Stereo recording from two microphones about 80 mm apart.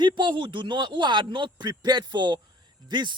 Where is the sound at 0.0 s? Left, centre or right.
Right.